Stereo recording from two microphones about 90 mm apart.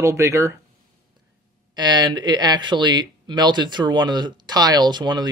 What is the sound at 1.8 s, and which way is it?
Speech, 55° right (ahead or behind).